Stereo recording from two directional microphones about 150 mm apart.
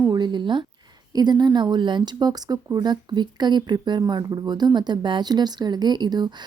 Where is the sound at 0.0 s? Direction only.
30° right (ahead or behind).